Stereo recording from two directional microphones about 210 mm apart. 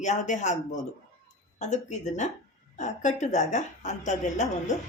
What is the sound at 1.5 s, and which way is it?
Speech, 35° left (ahead or behind).